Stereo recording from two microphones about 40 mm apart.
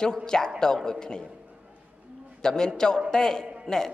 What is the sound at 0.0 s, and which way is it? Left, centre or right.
Speech, centre.